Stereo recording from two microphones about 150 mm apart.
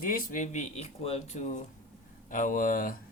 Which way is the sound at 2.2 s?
65° left (ahead or behind).